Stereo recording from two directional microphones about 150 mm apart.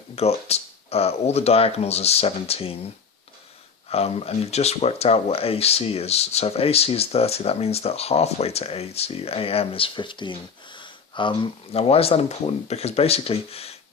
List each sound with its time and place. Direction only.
0.2 s speech: 45° left (ahead or behind)
3.8 s speech: 40° left (ahead or behind)